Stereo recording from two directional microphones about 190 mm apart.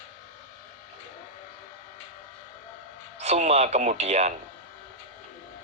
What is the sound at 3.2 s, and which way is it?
Speech, 35° right (ahead or behind).